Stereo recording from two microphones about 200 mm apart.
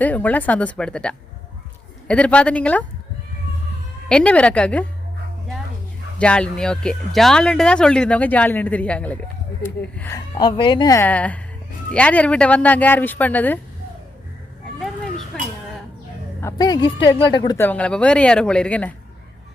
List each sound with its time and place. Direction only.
0.0 s speech: 10° left (ahead or behind)
4.1 s speech: 5° left (ahead or behind)
6.1 s speech: 5° left (ahead or behind)
10.3 s speech: 20° left (ahead or behind)
15.3 s a sound: 5° left (ahead or behind)
16.4 s a woman's voice: 15° left (ahead or behind)